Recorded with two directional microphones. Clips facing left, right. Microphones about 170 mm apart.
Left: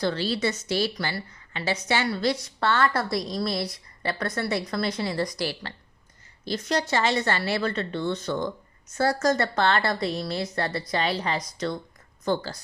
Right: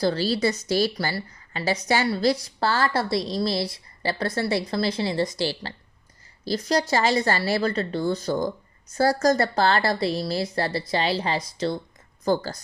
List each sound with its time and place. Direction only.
0.0 s a woman's voice: 35° right (ahead or behind)
12.2 s a woman's voice: 40° right (ahead or behind)